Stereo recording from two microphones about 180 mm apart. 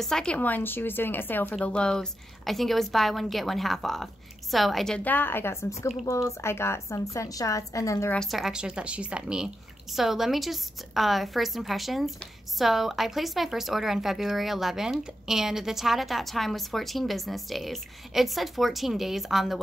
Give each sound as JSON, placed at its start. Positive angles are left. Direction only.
{"t": 0.0, "sound": "speech", "side_deg": 5}
{"t": 8.2, "sound": "speech", "side_deg": 0}